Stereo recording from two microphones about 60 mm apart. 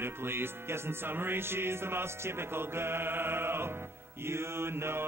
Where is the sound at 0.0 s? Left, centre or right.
Right.